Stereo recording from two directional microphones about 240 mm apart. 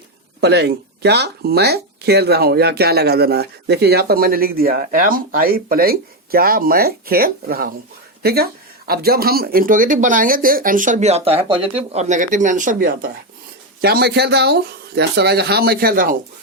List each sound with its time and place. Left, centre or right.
0.4 s speech: right